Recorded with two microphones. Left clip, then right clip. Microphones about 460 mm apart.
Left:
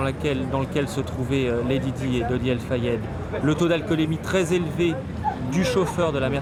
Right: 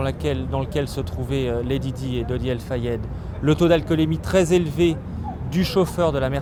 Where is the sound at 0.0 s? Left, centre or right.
Right.